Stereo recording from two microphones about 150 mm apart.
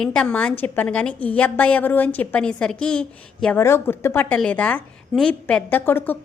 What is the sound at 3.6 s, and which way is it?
A woman's voice, 15° left (ahead or behind).